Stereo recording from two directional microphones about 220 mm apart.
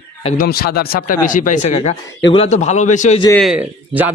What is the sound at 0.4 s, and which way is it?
Speech, 45° left (ahead or behind).